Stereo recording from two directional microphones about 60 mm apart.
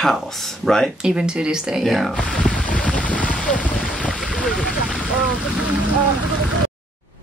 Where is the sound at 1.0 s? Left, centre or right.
Centre.